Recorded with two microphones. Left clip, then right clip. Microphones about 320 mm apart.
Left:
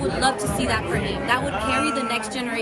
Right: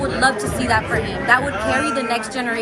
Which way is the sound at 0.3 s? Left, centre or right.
Centre.